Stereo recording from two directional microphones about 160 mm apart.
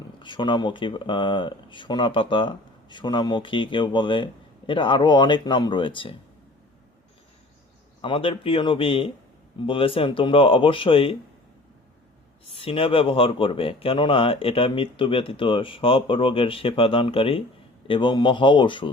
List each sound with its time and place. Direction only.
0.2 s speech: 30° left (ahead or behind)
8.0 s speech: 35° left (ahead or behind)
12.5 s speech: 35° left (ahead or behind)